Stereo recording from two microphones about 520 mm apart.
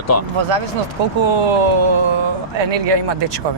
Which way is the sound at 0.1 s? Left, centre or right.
Left.